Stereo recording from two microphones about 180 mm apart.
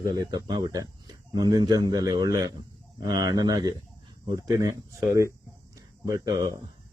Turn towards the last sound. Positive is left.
turn(degrees=-20)  # may be behind; listen again after turning